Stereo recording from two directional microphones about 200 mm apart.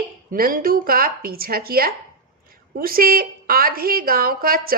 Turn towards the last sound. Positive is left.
turn(degrees=-45)  # may be behind; listen again after turning